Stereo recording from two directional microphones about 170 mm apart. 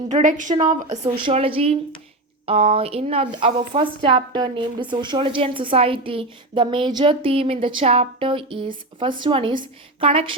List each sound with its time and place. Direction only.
0.1 s a woman's voice: 50° right (ahead or behind); by 10.3 s 35° right (ahead or behind)